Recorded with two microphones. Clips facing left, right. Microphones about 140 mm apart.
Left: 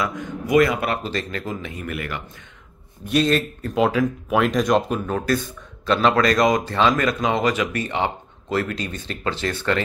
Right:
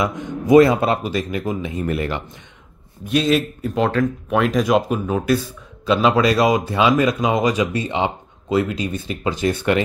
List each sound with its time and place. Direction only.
0.0 s speech: 25° right (ahead or behind)
1.0 s speech: 10° right (ahead or behind)
3.1 s speech: centre (ahead or behind)